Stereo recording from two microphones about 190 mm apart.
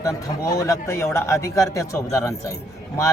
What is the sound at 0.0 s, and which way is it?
A man's voice, 20° left (ahead or behind).